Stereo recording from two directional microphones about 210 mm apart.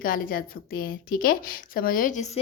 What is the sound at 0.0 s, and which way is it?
Speech, 40° left (ahead or behind).